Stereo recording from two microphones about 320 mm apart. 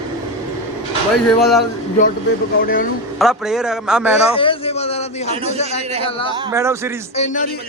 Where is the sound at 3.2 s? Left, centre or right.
Centre.